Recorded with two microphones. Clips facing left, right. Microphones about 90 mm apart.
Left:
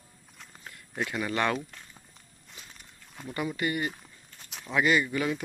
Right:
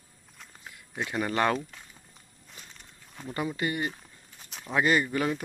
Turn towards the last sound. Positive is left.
turn(degrees=-35)  # may be behind; listen again after turning